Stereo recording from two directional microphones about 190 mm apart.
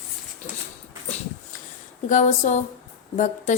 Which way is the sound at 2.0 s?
40° left (ahead or behind).